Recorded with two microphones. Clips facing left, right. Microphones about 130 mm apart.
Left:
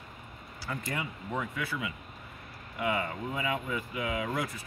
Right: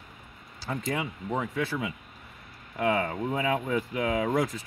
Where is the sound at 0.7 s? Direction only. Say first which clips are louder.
Right 5 dB; 35° right (ahead or behind).